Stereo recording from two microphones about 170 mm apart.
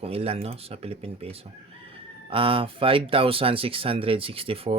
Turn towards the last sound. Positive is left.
turn(degrees=-35)  # may be behind; listen again after turning